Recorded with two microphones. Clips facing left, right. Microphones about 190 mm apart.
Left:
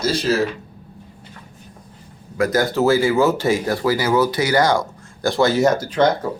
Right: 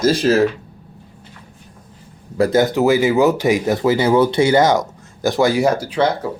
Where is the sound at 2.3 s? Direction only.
30° right (ahead or behind); by 6.1 s 10° right (ahead or behind).